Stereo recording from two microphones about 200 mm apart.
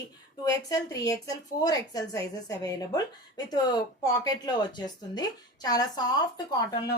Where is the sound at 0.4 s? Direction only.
20° left (ahead or behind).